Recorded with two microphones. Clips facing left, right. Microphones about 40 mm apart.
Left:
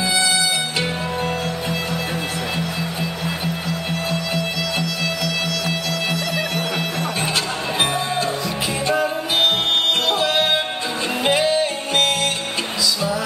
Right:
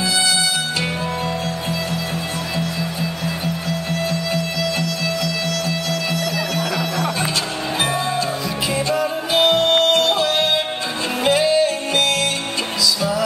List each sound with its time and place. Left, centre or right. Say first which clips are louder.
8.8 s music: even; left